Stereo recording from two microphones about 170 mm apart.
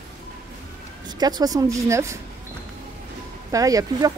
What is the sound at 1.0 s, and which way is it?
Speech, 25° right (ahead or behind).